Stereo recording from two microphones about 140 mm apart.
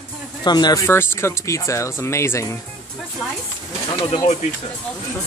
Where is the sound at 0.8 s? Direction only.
20° left (ahead or behind).